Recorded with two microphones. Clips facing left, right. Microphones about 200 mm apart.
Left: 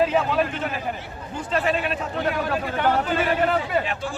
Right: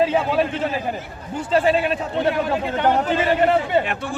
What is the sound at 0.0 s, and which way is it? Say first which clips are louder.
A man's voice: right 2 dB; 30° right (ahead or behind).